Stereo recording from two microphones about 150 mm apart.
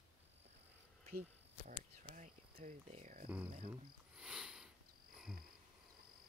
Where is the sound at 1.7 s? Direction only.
60° right (ahead or behind).